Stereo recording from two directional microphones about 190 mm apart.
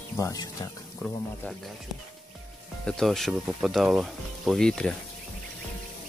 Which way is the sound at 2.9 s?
Centre (ahead or behind).